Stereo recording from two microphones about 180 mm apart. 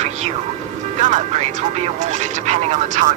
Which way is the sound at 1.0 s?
40° right (ahead or behind).